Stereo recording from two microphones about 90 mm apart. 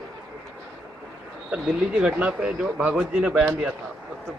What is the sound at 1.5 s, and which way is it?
Speech, 10° right (ahead or behind).